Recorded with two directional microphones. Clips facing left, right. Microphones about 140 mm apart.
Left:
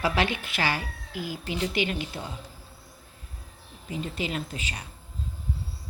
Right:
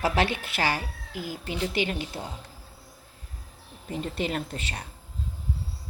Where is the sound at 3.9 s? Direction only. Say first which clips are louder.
Right 2 dB; 50° right (ahead or behind).